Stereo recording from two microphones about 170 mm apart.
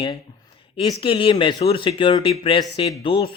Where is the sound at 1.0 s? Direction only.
30° left (ahead or behind).